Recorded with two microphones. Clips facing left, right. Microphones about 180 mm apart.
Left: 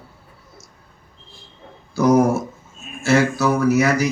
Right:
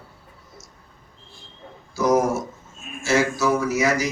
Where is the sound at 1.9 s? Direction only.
60° left (ahead or behind).